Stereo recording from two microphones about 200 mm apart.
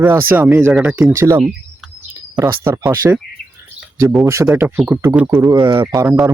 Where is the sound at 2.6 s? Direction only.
10° right (ahead or behind).